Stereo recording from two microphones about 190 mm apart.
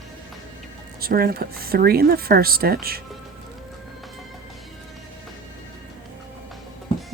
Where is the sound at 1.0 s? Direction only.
50° right (ahead or behind).